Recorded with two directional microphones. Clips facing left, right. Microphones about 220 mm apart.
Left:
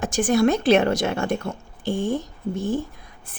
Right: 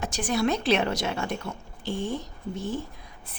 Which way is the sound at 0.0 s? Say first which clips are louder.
Left 7 dB; 50° left (ahead or behind).